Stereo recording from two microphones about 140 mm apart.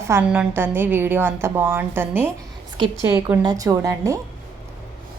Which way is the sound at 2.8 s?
30° right (ahead or behind).